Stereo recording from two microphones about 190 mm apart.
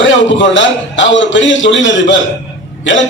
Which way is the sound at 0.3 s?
75° left (ahead or behind).